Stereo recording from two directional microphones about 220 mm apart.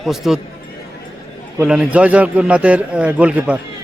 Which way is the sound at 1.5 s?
5° right (ahead or behind).